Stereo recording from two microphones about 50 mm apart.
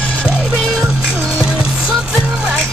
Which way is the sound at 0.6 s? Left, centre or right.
Centre.